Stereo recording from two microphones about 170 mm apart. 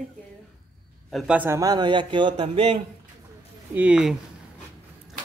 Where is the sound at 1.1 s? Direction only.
5° right (ahead or behind); by 2.8 s 30° right (ahead or behind).